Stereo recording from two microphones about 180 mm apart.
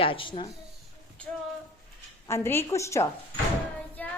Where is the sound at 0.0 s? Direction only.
30° left (ahead or behind).